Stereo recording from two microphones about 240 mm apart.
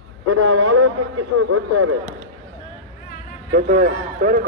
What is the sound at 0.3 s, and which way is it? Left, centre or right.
A man's voice, right.